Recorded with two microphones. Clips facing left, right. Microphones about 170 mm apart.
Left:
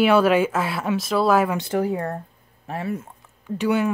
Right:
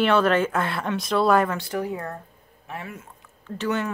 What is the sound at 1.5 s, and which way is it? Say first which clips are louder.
Speech: left 5 dB; 25° left (ahead or behind).